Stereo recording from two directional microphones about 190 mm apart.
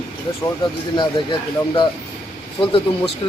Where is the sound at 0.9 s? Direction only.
25° left (ahead or behind).